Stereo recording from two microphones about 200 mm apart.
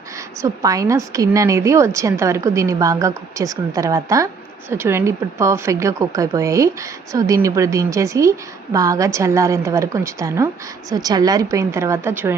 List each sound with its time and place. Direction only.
0.2 s a woman's voice: 15° right (ahead or behind)